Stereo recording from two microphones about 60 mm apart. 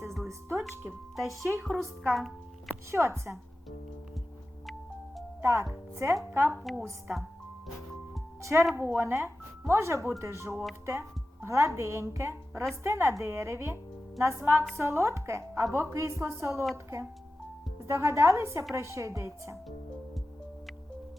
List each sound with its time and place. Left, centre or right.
0.3 s speech: right
0.6 s a woman's voice: centre
2.1 s music: centre
3.0 s speech: right
5.4 s speech: right
6.6 s a woman's voice: centre
7.1 s speech: right
8.4 s speech: right
8.7 s speech: right